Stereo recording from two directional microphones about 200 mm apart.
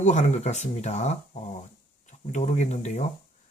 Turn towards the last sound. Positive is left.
turn(degrees=35)  # may be behind; listen again after turning